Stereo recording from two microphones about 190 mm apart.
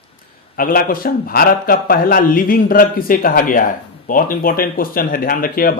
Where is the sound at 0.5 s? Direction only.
50° left (ahead or behind).